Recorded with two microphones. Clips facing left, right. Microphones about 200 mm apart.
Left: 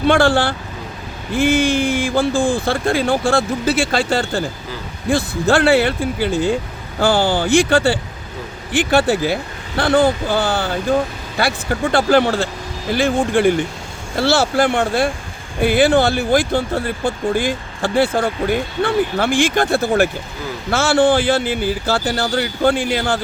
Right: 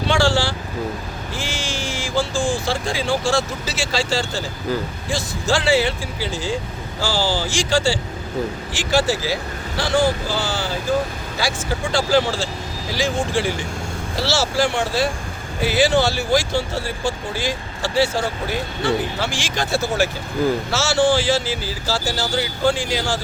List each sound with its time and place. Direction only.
0.0 s speech: 55° left (ahead or behind)